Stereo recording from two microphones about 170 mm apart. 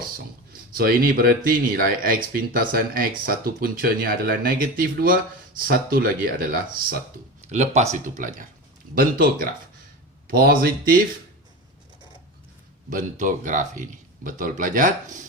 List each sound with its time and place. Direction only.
0.8 s speech: 60° right (ahead or behind)
7.5 s speech: 40° right (ahead or behind); by 11.0 s 60° right (ahead or behind)
12.9 s speech: 50° right (ahead or behind)